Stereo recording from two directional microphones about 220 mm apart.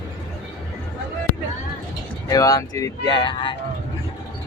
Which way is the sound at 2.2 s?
15° left (ahead or behind).